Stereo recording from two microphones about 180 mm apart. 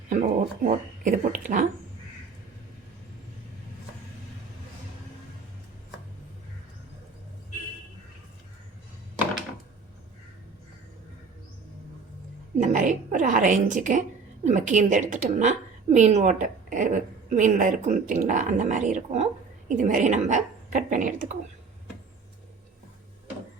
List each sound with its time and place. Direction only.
0.1 s a woman's voice: 45° right (ahead or behind)
12.5 s a sound: 45° right (ahead or behind)
14.4 s a woman's voice: 45° right (ahead or behind)